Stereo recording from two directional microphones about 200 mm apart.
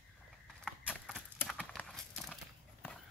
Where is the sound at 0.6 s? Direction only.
5° left (ahead or behind).